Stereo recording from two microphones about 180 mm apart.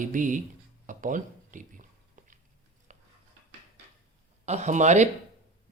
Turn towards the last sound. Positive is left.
turn(degrees=-40)  # may be behind; listen again after turning